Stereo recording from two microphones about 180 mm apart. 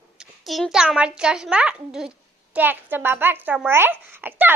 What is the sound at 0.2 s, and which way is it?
A child's voice, centre (ahead or behind).